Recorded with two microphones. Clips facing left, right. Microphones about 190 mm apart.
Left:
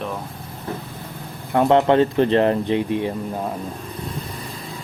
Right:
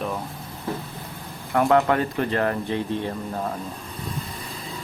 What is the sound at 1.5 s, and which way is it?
Speech, 25° left (ahead or behind).